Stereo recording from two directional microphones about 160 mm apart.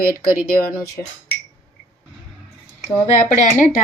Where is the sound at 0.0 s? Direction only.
65° left (ahead or behind).